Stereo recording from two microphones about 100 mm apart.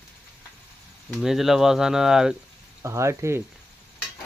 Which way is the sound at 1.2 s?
Centre (ahead or behind).